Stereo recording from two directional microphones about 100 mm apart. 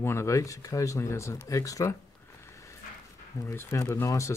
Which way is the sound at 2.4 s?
30° left (ahead or behind).